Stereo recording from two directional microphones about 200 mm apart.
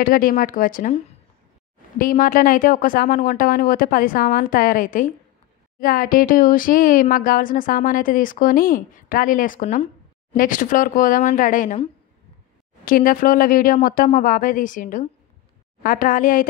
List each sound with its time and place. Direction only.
0.0 s speech: 45° left (ahead or behind)
12.8 s speech: 45° left (ahead or behind)